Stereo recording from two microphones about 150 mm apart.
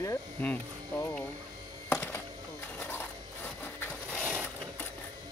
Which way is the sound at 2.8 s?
10° left (ahead or behind).